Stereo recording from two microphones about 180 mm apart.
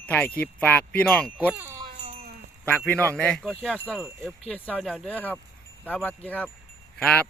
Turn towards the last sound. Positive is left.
turn(degrees=5)  # may be behind; listen again after turning